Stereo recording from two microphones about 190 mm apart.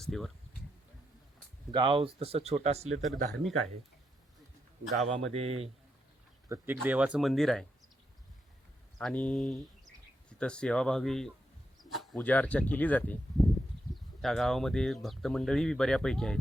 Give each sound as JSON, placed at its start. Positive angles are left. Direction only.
{"t": 0.0, "sound": "speech", "side_deg": 0}
{"t": 1.7, "sound": "speech", "side_deg": -30}
{"t": 3.3, "sound": "speech", "side_deg": 0}
{"t": 4.9, "sound": "speech", "side_deg": 0}
{"t": 5.3, "sound": "speech", "side_deg": -30}
{"t": 6.5, "sound": "speech", "side_deg": -10}
{"t": 9.0, "sound": "speech", "side_deg": 5}